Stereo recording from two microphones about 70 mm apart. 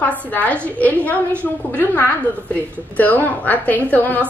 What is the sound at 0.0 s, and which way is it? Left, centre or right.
A woman's voice, left.